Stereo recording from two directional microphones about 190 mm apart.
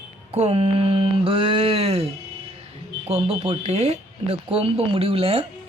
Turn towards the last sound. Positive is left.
turn(degrees=-30)  # may be behind; listen again after turning